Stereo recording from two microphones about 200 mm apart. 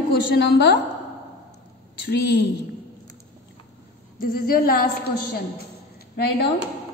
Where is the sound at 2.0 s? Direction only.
55° left (ahead or behind).